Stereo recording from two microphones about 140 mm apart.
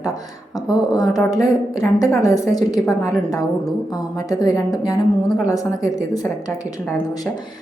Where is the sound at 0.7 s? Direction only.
25° left (ahead or behind).